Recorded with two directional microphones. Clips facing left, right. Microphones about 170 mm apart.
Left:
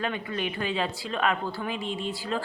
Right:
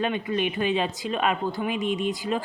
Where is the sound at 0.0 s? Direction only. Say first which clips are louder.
Right 5 dB; 20° right (ahead or behind).